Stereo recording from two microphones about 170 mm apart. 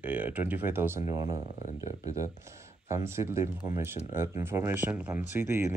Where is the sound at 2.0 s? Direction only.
20° right (ahead or behind).